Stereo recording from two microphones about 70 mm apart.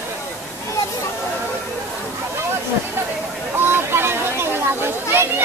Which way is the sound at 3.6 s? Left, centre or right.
Right.